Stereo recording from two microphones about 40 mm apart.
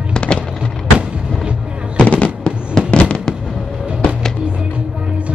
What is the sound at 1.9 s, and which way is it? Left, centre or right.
Fireworks, left.